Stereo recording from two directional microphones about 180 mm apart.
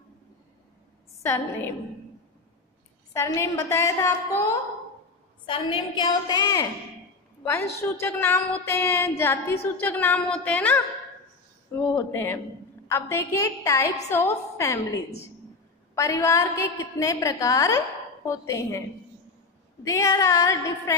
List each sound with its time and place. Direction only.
1.2 s a woman's voice: 15° left (ahead or behind)
3.1 s a woman's voice: 15° left (ahead or behind)
5.5 s a woman's voice: 25° left (ahead or behind)
15.9 s a woman's voice: 15° left (ahead or behind)
19.8 s a woman's voice: 15° left (ahead or behind)